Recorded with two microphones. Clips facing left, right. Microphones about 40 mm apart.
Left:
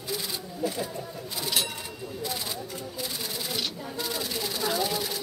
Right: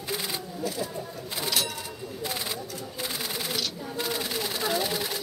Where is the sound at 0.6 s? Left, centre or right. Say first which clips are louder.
Left 2 dB; centre.